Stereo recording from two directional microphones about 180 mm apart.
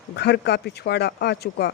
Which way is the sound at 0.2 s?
65° left (ahead or behind).